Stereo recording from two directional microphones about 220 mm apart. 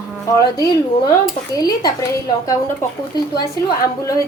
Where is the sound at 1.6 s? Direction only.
15° left (ahead or behind).